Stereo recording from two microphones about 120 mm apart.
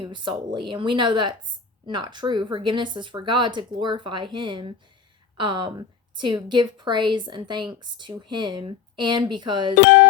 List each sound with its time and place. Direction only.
0.0 s speech: 40° right (ahead or behind)